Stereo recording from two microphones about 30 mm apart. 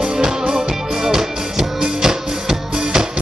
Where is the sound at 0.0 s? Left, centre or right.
Right.